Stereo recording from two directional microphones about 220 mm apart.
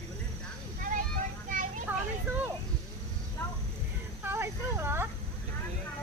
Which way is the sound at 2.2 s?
10° right (ahead or behind).